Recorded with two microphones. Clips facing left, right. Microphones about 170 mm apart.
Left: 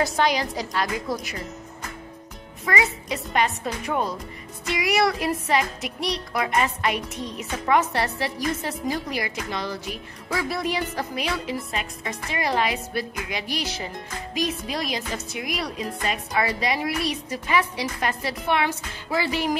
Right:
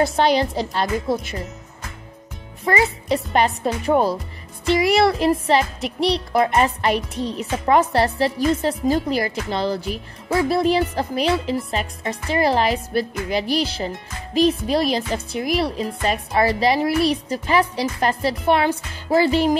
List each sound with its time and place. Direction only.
0.0 s a woman's voice: 30° right (ahead or behind)
2.6 s a woman's voice: 30° right (ahead or behind)